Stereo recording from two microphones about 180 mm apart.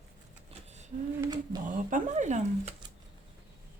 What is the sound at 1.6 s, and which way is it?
Speech, 45° right (ahead or behind).